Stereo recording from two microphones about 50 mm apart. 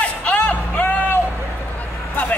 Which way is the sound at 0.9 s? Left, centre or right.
Left.